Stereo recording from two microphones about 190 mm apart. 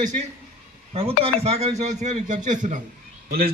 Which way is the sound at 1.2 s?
30° right (ahead or behind).